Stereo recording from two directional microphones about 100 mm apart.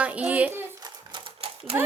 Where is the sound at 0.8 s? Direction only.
50° right (ahead or behind); by 1.8 s 75° right (ahead or behind).